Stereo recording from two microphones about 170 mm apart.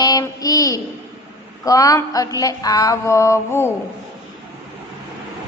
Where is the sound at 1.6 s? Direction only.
20° left (ahead or behind).